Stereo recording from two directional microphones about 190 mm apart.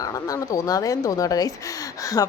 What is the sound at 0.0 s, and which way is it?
Speech, 20° left (ahead or behind).